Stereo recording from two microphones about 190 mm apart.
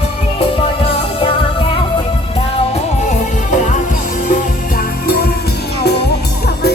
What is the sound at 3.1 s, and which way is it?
Music, 40° left (ahead or behind).